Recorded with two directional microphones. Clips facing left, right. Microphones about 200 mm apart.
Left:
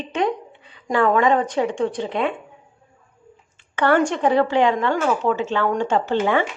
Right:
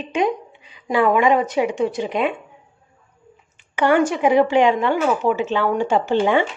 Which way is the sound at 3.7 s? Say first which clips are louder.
Right 1 dB; 10° right (ahead or behind).